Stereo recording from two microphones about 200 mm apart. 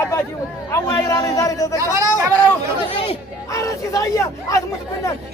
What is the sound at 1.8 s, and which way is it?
Speech, 15° right (ahead or behind).